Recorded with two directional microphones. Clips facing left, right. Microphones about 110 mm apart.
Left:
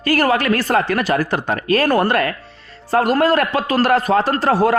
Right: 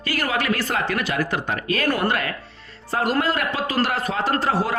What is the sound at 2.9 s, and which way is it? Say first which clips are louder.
Speech: left 7 dB; 50° left (ahead or behind).